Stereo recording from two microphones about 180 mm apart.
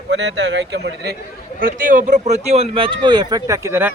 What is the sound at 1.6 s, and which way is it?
Speech, 50° right (ahead or behind).